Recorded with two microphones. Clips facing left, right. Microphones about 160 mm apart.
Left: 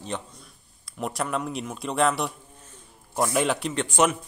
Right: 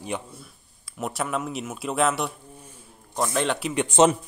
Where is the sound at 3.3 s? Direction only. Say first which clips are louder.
Even; centre (ahead or behind).